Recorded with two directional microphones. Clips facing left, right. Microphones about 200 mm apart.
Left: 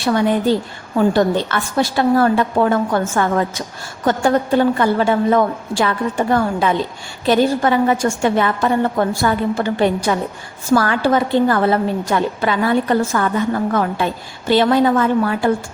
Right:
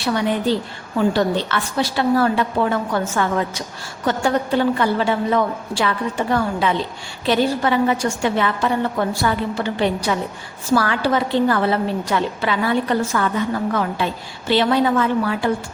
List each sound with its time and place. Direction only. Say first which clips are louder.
0.9 s a woman's voice: left 3 dB; 45° left (ahead or behind)